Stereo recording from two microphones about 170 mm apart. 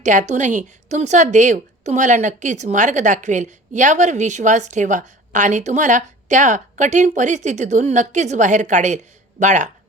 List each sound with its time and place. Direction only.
0.0 s speech: 45° right (ahead or behind)